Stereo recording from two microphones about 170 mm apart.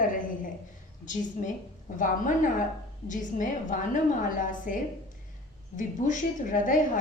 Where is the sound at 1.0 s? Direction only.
45° left (ahead or behind).